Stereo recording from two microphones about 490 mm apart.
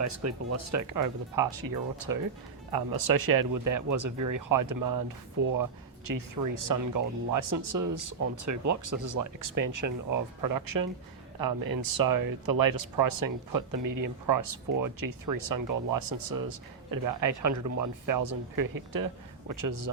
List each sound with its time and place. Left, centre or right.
0.0 s speech: right